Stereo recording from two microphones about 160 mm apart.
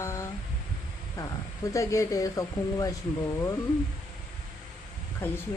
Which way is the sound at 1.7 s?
20° left (ahead or behind).